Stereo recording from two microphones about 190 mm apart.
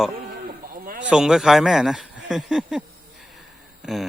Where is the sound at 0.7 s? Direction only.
45° right (ahead or behind).